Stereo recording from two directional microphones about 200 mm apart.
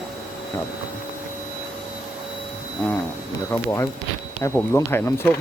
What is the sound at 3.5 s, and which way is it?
Speech, 15° left (ahead or behind).